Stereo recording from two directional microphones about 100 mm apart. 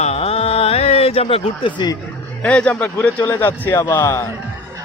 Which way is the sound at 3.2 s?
20° left (ahead or behind).